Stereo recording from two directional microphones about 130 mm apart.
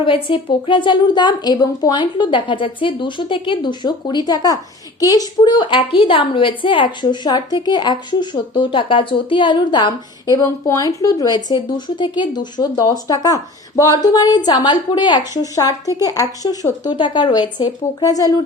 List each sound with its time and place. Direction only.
0.0 s a woman's voice: 40° left (ahead or behind)